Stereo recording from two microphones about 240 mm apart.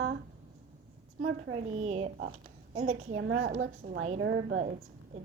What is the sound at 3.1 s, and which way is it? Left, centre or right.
Speech, right.